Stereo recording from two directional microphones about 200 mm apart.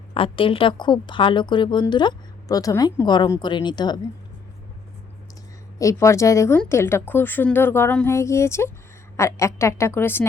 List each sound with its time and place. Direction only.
0.1 s a woman's voice: 25° left (ahead or behind)
5.8 s speech: 15° left (ahead or behind)